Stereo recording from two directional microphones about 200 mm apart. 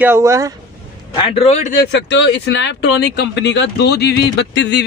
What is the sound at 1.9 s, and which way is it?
Speech, 65° left (ahead or behind).